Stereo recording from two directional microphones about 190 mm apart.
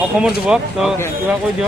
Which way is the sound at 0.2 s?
5° right (ahead or behind).